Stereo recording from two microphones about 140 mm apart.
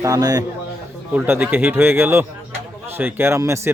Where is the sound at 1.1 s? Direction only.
10° right (ahead or behind).